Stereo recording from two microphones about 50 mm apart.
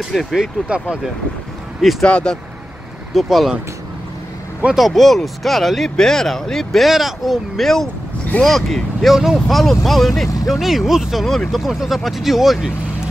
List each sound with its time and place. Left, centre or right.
0.0 s speech: centre
1.8 s speech: centre
2.0 s speech: left
3.2 s speech: centre
4.7 s speech: centre
6.9 s speech: centre
9.1 s speech: centre
9.5 s speech: centre
11.2 s speech: centre
11.6 s speech: centre